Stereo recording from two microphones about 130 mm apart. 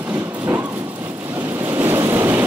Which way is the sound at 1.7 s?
20° right (ahead or behind).